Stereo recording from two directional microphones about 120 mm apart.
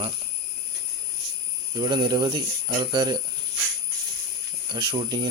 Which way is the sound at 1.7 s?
40° right (ahead or behind).